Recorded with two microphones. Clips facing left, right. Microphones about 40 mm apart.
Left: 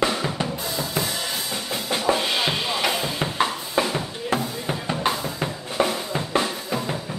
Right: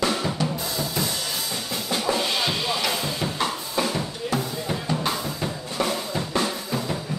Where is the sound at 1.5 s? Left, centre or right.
Left.